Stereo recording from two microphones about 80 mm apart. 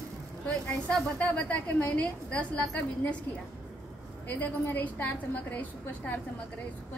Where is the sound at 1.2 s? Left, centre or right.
Centre.